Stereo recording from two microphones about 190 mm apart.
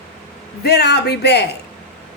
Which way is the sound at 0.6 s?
60° left (ahead or behind).